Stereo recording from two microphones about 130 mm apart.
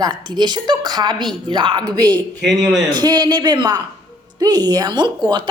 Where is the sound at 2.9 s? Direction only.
30° right (ahead or behind).